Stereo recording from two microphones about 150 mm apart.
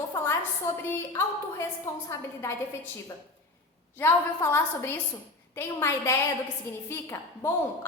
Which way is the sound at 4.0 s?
15° left (ahead or behind).